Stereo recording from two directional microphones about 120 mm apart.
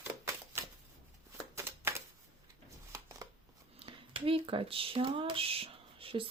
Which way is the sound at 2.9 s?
25° right (ahead or behind).